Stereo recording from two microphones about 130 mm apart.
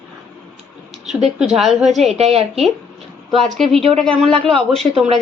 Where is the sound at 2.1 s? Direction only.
55° right (ahead or behind).